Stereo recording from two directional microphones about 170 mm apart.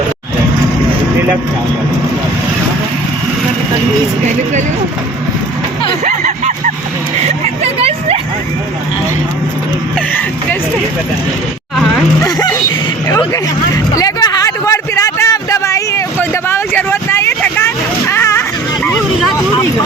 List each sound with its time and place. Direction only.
7.6 s vehicle: 35° right (ahead or behind)
12.2 s speech: 15° left (ahead or behind)
13.1 s vehicle: 20° left (ahead or behind)
13.9 s a sound: 20° left (ahead or behind)
16.3 s vehicle: 15° left (ahead or behind)
18.1 s a sound: 15° left (ahead or behind)